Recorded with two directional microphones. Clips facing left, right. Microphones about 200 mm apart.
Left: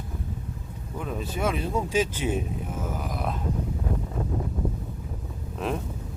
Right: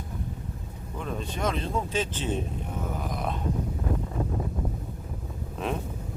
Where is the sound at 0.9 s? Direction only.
5° left (ahead or behind).